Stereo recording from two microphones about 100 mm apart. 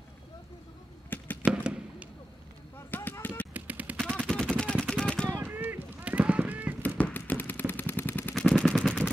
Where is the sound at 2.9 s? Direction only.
20° left (ahead or behind).